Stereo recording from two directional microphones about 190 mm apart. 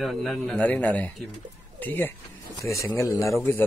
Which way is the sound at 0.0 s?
Centre (ahead or behind).